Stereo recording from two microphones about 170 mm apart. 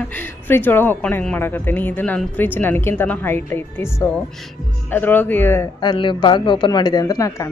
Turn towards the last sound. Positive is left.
turn(degrees=20)  # may be behind; listen again after turning